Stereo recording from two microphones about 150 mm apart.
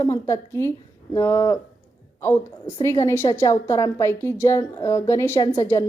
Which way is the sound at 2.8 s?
20° left (ahead or behind).